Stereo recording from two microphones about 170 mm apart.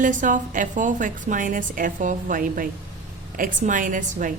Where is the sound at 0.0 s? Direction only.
50° right (ahead or behind).